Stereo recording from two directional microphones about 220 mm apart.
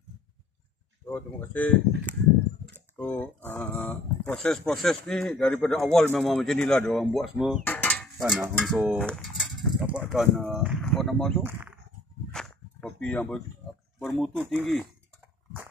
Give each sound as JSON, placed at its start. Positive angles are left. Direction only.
{"t": 1.1, "sound": "speech", "side_deg": 5}
{"t": 3.0, "sound": "speech", "side_deg": 5}
{"t": 12.4, "sound": "a sound", "side_deg": 0}
{"t": 14.2, "sound": "speech", "side_deg": 0}